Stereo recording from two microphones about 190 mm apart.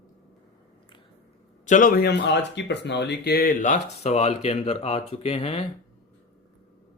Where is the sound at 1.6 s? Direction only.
45° left (ahead or behind).